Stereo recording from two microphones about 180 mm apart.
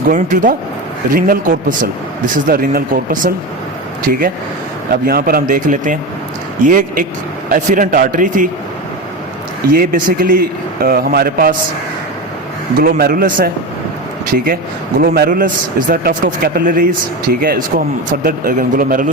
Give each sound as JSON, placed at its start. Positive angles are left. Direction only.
{"t": 0.1, "sound": "speech", "side_deg": -45}
{"t": 9.7, "sound": "a man's voice", "side_deg": -55}
{"t": 12.8, "sound": "a man's voice", "side_deg": -55}